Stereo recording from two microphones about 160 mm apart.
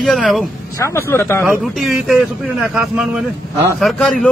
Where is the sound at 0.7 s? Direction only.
15° left (ahead or behind).